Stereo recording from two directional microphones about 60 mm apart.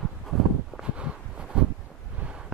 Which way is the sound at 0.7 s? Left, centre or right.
Centre.